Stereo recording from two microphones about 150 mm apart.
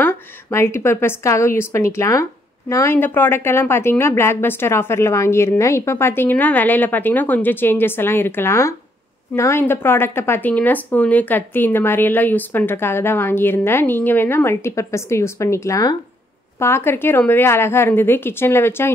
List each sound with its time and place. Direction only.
0.0 s speech: 15° left (ahead or behind)